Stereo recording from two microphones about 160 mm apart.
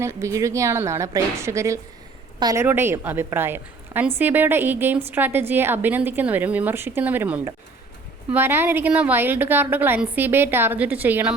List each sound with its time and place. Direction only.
0.0 s a woman's voice: 20° right (ahead or behind)